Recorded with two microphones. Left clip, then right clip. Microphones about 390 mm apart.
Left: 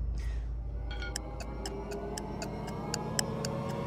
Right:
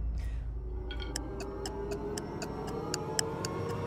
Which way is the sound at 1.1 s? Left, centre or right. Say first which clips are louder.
Right 2 dB; centre.